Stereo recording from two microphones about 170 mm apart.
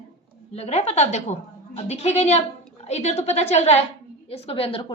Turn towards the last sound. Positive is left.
turn(degrees=35)  # may be behind; listen again after turning